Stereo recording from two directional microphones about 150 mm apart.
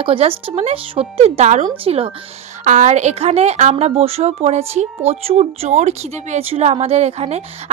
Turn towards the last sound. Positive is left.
turn(degrees=-45)  # may be behind; listen again after turning